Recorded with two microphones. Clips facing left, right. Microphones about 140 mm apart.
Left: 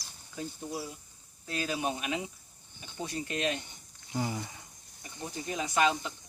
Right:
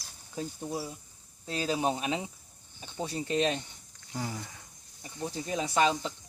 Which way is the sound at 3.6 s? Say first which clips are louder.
Right 1 dB; centre (ahead or behind).